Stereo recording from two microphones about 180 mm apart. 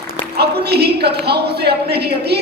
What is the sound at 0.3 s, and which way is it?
A man's voice, 65° right (ahead or behind).